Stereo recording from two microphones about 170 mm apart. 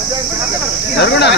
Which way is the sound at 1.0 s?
75° left (ahead or behind).